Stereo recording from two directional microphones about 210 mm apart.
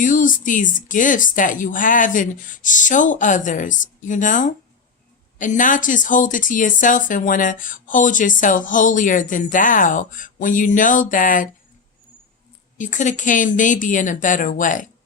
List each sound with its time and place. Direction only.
0.0 s speech: 40° left (ahead or behind)
12.7 s speech: 35° left (ahead or behind)